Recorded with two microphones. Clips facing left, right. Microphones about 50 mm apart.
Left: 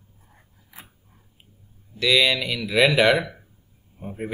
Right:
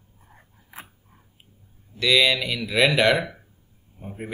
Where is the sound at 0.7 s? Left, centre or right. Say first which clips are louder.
Right 4 dB; right.